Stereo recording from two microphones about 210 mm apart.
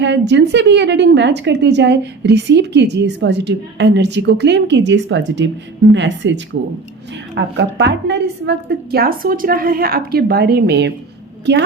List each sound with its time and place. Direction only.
0.0 s a woman's voice: 55° right (ahead or behind)